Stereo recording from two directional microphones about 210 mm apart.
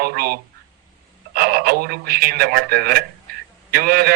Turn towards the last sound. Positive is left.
turn(degrees=-45)  # may be behind; listen again after turning